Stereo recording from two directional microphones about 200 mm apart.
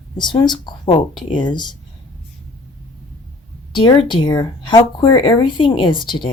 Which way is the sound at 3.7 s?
25° left (ahead or behind).